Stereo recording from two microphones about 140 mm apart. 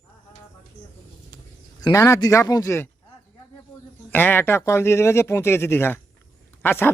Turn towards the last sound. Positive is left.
turn(degrees=15)  # may be behind; listen again after turning